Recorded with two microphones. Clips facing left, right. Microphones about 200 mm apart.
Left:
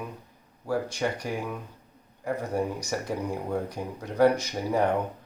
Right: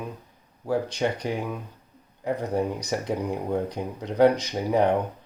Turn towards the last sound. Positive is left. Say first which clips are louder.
# right 3 dB
turn(degrees=-20)  # may be behind; listen again after turning